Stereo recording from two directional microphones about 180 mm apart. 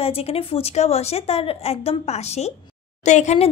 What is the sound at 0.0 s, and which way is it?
A woman's voice, 35° left (ahead or behind).